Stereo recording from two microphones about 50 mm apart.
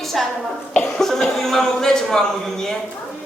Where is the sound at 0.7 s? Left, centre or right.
Centre.